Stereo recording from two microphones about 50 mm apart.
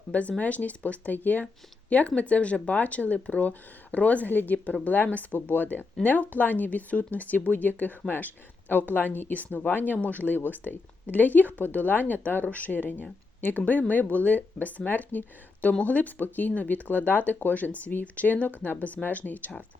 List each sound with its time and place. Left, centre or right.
0.1 s speech: left